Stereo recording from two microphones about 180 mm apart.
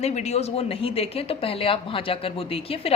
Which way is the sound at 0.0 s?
40° left (ahead or behind).